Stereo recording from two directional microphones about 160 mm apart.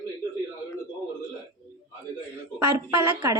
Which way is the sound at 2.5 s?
15° right (ahead or behind).